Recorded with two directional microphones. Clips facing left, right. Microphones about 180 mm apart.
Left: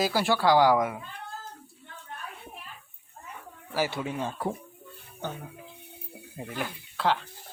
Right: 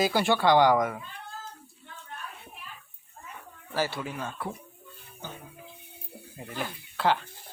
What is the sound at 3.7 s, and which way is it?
Speech, 15° left (ahead or behind).